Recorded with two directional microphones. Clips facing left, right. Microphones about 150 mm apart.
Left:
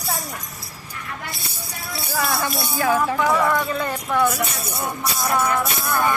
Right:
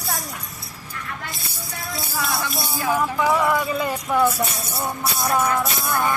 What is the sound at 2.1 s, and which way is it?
Music, 55° left (ahead or behind).